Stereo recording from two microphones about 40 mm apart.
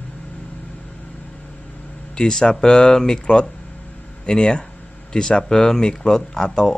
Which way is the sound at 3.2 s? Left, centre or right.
Left.